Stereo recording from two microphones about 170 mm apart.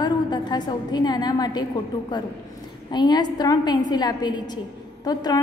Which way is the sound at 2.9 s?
25° left (ahead or behind).